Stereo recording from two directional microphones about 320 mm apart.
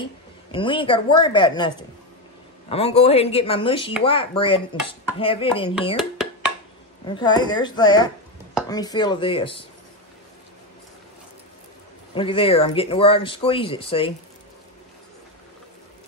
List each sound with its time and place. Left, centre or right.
0.0 s speech: centre
7.1 s speech: centre
12.1 s speech: centre